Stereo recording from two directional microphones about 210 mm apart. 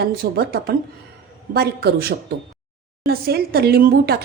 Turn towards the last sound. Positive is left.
turn(degrees=-50)  # may be behind; listen again after turning